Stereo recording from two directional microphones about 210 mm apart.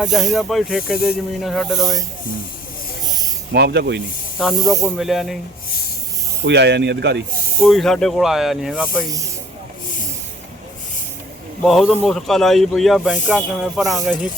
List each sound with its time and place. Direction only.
0.0 s speech: centre (ahead or behind)
3.1 s snake: 20° right (ahead or behind)
3.5 s speech: 50° right (ahead or behind)
4.5 s speech: 15° right (ahead or behind)
4.9 s speech: centre (ahead or behind)
6.4 s speech: 55° right (ahead or behind)
7.6 s speech: centre (ahead or behind)
9.0 s speech: 15° right (ahead or behind)
11.6 s speech: centre (ahead or behind)